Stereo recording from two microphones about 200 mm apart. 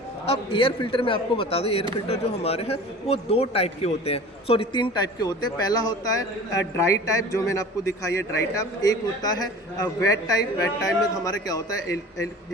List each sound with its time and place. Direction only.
0.3 s a man's voice: 25° left (ahead or behind)